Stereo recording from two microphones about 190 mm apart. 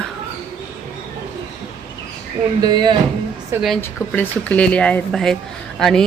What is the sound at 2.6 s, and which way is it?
Speech, 20° right (ahead or behind).